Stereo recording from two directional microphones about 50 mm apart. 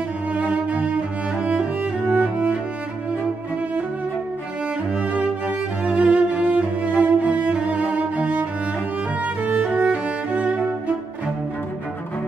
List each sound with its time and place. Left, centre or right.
0.3 s cello: right
1.4 s music: right
5.9 s music: right